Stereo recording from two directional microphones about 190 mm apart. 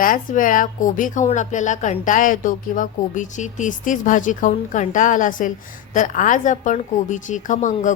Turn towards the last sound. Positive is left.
turn(degrees=40)  # may be behind; listen again after turning